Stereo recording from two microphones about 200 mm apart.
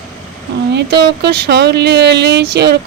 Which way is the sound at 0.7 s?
55° right (ahead or behind).